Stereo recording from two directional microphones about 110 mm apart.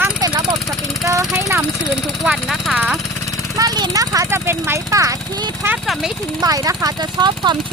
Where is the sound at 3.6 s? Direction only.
35° right (ahead or behind).